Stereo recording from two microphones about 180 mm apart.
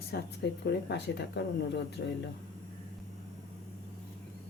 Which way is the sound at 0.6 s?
65° left (ahead or behind).